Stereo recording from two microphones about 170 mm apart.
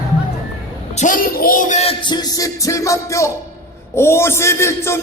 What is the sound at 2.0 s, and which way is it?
Music, 25° left (ahead or behind).